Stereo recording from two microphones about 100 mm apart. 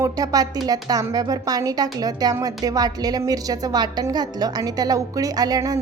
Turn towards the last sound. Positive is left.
turn(degrees=-40)  # may be behind; listen again after turning